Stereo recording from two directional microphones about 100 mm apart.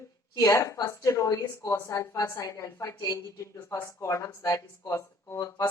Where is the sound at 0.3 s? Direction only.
35° left (ahead or behind).